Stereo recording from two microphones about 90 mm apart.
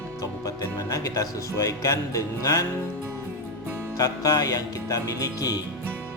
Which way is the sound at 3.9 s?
40° left (ahead or behind).